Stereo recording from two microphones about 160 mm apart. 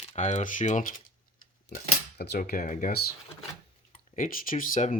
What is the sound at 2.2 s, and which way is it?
Speech, 80° left.